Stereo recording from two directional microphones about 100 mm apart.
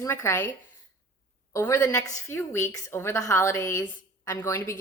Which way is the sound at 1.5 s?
25° left (ahead or behind).